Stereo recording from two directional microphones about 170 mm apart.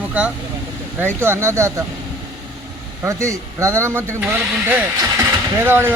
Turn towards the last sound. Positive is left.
turn(degrees=-15)  # may be behind; listen again after turning